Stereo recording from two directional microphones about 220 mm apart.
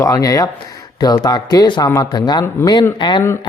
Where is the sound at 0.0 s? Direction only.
15° left (ahead or behind).